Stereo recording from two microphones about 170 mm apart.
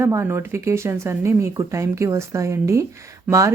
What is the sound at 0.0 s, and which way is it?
Speech, 15° right (ahead or behind).